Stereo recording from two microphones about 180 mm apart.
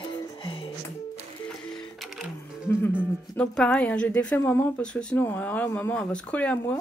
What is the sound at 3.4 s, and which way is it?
Speech, 5° left (ahead or behind).